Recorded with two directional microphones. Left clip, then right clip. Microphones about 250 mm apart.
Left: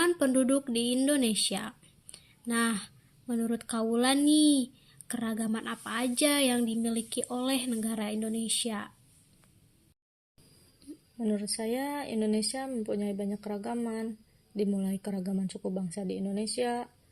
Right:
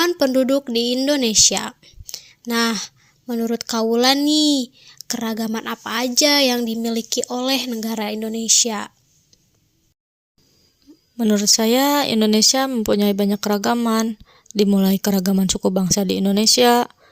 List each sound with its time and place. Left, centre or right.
0.0 s a woman's voice: right
11.2 s speech: right